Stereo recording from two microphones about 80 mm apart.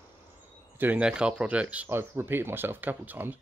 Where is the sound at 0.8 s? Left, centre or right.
Centre.